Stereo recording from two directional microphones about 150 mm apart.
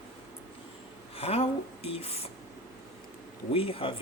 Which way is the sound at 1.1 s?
40° left (ahead or behind).